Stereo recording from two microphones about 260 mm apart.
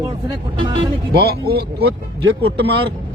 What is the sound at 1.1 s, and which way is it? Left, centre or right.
Speech, right.